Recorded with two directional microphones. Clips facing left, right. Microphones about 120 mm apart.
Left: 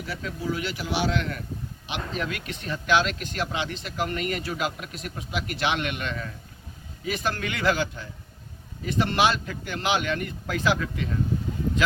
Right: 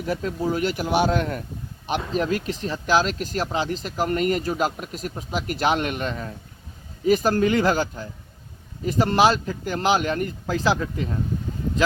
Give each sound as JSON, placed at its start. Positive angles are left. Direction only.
{"t": 0.0, "sound": "speech", "side_deg": -45}